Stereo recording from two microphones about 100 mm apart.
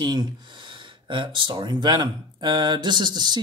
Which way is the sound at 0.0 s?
45° right (ahead or behind).